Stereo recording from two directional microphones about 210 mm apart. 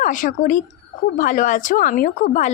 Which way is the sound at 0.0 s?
40° left (ahead or behind).